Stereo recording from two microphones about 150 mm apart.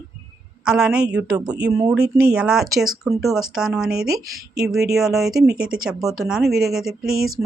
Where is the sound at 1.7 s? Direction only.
20° right (ahead or behind).